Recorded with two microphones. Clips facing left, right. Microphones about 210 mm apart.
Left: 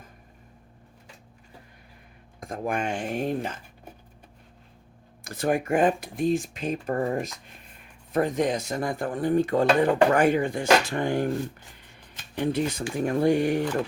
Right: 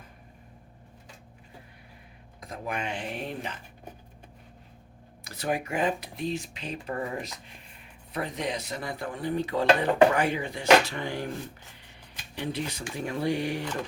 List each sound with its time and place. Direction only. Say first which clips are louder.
2.4 s speech: left 5 dB; 50° left (ahead or behind)
5.2 s speech: left 5 dB; 50° left (ahead or behind)
12.4 s speech: left 7 dB; 50° left (ahead or behind)